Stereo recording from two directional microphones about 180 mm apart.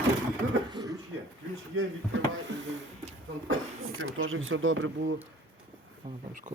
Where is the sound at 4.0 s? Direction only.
90° right.